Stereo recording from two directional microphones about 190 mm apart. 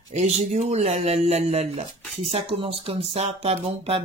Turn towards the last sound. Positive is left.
turn(degrees=-30)  # may be behind; listen again after turning